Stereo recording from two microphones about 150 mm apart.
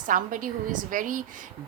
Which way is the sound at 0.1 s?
60° right (ahead or behind).